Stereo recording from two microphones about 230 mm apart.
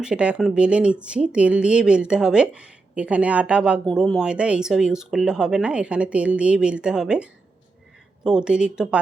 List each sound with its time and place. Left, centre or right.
0.0 s speech: centre